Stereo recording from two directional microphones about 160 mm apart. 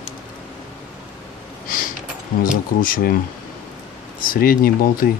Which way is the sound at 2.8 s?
65° left (ahead or behind).